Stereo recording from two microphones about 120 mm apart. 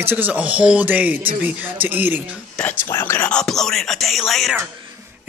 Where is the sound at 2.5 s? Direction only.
15° left (ahead or behind).